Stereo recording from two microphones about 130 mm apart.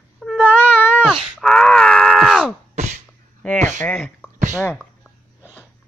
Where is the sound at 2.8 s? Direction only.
65° right (ahead or behind).